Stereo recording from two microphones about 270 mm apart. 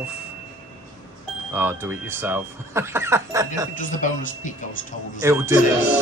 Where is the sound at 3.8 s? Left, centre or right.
Left.